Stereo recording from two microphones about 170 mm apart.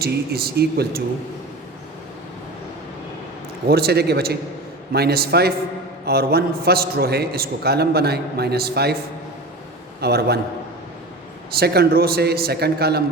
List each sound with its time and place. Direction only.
0.0 s a man's voice: 65° right (ahead or behind)
3.7 s a man's voice: 70° right (ahead or behind)
10.0 s a man's voice: 70° right (ahead or behind)
11.5 s a man's voice: 70° right (ahead or behind)